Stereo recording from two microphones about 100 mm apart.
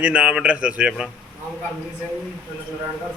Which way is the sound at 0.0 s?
10° right (ahead or behind).